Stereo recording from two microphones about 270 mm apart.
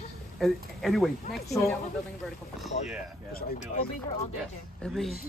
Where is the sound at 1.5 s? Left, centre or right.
Centre.